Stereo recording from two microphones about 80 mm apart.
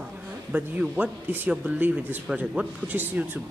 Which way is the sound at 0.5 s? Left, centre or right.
Centre.